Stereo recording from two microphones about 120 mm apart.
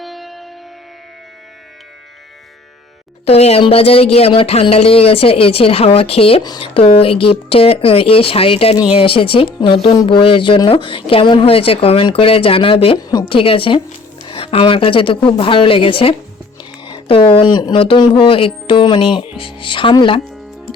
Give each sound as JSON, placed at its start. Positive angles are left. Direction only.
{"t": 0.0, "sound": "music", "side_deg": 0}
{"t": 3.2, "sound": "speech", "side_deg": 55}
{"t": 13.0, "sound": "a woman's voice", "side_deg": 30}
{"t": 13.2, "sound": "speech", "side_deg": 50}